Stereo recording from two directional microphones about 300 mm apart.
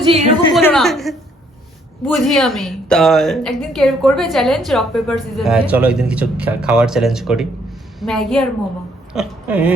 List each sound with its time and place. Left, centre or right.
0.0 s a woman's voice: centre
0.5 s a woman's voice: centre